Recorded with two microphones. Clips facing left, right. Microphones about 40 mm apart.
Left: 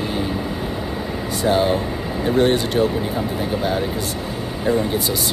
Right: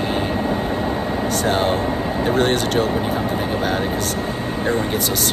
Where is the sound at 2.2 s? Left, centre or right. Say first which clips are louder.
Left 2 dB; right.